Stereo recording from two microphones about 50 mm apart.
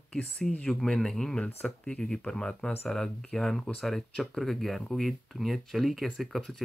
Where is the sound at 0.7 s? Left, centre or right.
Centre.